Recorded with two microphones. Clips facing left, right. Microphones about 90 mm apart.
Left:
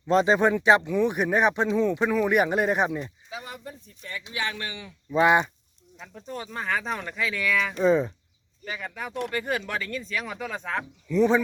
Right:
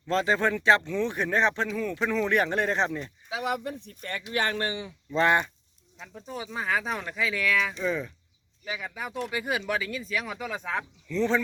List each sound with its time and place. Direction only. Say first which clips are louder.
0.1 s speech: left 5 dB; 20° left (ahead or behind)
3.2 s speech: right 8 dB; 75° right (ahead or behind)
4.3 s speech: right 4 dB; 50° right (ahead or behind); by 4.9 s 35° right (ahead or behind)
5.1 s speech: left 3 dB; 15° left (ahead or behind)
6.0 s speech: left 1 dB; centre (ahead or behind)
7.9 s speech: left 8 dB; 30° left (ahead or behind)
8.6 s speech: left 1 dB; 5° right (ahead or behind)
11.1 s speech: left 5 dB; 15° left (ahead or behind)